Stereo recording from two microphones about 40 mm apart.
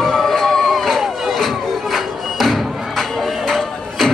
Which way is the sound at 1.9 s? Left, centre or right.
Centre.